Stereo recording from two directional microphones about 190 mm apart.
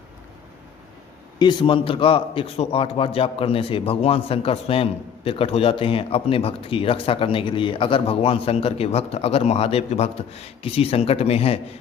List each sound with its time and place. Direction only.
1.4 s a man's voice: 25° left (ahead or behind)